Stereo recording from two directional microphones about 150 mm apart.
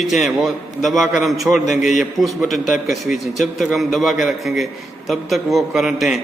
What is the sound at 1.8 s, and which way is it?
Speech, 55° left (ahead or behind).